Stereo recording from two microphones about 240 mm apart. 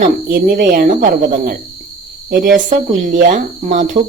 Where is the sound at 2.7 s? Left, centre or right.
Right.